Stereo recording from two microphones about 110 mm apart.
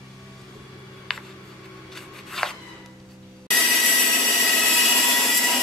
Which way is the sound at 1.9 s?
Centre (ahead or behind).